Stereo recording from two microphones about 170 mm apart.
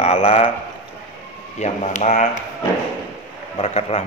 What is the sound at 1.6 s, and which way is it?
Speech, 40° left (ahead or behind).